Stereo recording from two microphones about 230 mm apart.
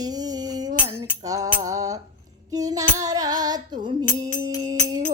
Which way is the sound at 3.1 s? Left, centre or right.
Centre.